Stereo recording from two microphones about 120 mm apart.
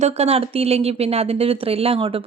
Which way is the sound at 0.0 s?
60° right (ahead or behind).